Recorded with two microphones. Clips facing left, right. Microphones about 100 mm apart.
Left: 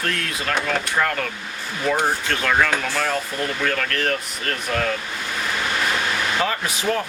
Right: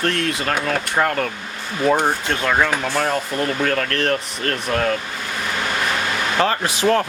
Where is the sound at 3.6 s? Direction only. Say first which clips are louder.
Right 3 dB; 40° right (ahead or behind).